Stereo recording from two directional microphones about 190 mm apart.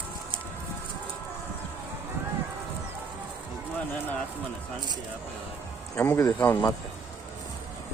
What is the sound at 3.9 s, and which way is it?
Speech, 10° left (ahead or behind).